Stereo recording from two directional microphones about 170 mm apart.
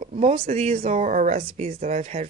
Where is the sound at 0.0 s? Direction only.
40° right (ahead or behind).